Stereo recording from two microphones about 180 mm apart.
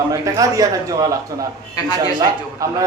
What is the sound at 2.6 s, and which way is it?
Speech, 15° right (ahead or behind).